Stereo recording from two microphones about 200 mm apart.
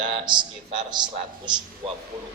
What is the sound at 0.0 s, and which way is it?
A man's voice, 25° right (ahead or behind).